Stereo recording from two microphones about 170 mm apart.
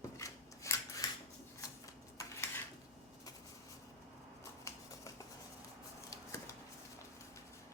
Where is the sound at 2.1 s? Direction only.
15° left (ahead or behind).